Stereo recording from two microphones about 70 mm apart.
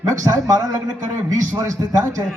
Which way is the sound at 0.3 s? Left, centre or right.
Right.